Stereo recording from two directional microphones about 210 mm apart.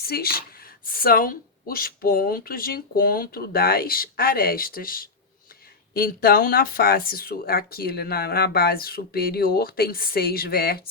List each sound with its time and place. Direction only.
0.0 s speech: 45° left (ahead or behind)